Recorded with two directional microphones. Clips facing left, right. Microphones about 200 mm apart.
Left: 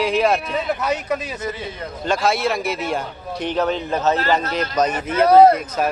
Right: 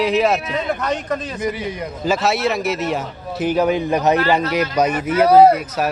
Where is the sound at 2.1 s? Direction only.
Centre (ahead or behind).